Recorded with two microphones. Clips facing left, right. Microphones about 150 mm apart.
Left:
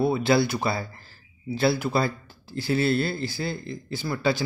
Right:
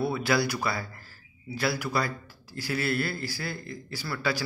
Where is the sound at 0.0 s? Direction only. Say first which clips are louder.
Left 5 dB; 25° left (ahead or behind).